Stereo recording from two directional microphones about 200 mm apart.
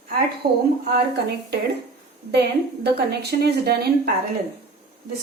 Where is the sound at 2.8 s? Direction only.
55° right (ahead or behind).